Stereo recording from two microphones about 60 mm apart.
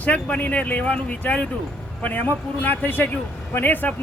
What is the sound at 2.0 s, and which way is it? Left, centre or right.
A man's voice, left.